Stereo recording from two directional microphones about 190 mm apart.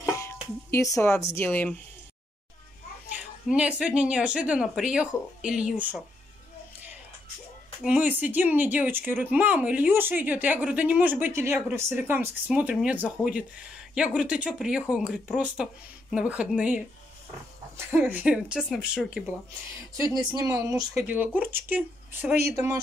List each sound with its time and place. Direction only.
0.2 s music: 15° left (ahead or behind)
1.0 s speech: 15° left (ahead or behind)
3.2 s a woman's voice: 5° right (ahead or behind)
7.8 s a woman's voice: 10° right (ahead or behind)
20.0 s speech: 20° right (ahead or behind)